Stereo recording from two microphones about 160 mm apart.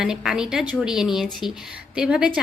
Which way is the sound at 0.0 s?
5° right (ahead or behind).